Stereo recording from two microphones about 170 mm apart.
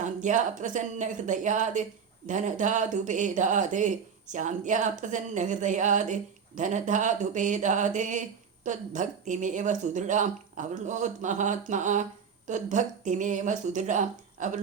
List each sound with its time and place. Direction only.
0.0 s speech: 45° right (ahead or behind)